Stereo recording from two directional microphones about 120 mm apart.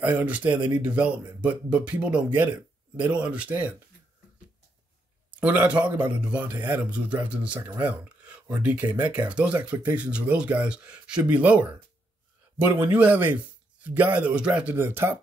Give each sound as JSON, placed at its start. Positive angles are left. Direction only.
{"t": 0.0, "sound": "speech", "side_deg": -15}
{"t": 5.4, "sound": "speech", "side_deg": -10}
{"t": 12.7, "sound": "speech", "side_deg": -15}